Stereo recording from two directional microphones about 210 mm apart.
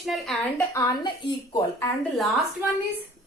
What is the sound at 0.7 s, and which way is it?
A woman's voice, 20° left (ahead or behind).